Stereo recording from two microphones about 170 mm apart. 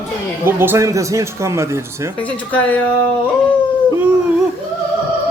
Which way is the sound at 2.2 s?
10° left (ahead or behind).